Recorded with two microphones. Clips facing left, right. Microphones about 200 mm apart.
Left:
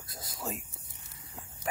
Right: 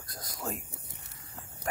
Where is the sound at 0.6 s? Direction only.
65° right (ahead or behind).